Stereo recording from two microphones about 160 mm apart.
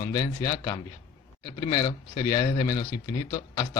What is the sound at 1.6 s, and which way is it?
Speech, 50° left (ahead or behind).